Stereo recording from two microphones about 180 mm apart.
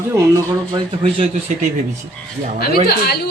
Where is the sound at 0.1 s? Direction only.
15° right (ahead or behind).